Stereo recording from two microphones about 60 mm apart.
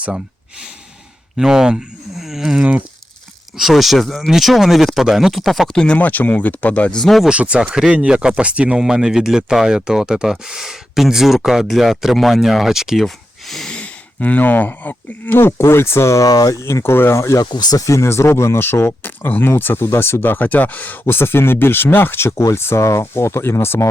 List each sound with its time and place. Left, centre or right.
1.4 s speech: centre
5.7 s speech: centre
6.0 s speech: left
6.9 s speech: centre
7.3 s speech: right; by 13.7 s centre
13.7 s speech: left
16.6 s speech: left
17.7 s speech: left
21.0 s speech: left